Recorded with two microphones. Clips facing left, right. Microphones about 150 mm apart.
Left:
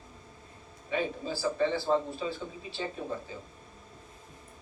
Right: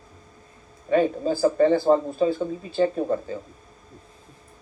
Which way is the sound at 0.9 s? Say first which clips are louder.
Right 11 dB; 50° right (ahead or behind).